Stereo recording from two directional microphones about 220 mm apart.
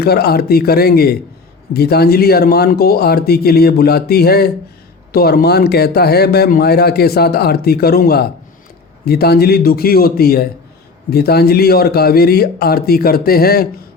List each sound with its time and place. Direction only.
0.0 s speech: 45° left (ahead or behind)